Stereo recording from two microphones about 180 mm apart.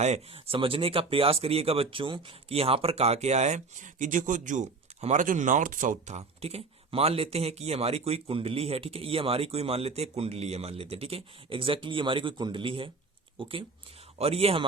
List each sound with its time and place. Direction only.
0.0 s speech: 35° right (ahead or behind)